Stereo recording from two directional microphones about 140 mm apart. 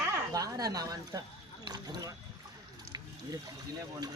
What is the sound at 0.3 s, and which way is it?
A woman's voice, 25° right (ahead or behind).